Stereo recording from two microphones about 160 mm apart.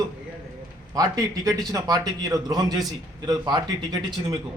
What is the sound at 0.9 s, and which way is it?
A man's voice, 25° right (ahead or behind).